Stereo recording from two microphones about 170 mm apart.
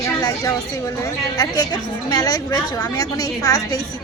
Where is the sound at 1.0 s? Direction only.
20° left (ahead or behind).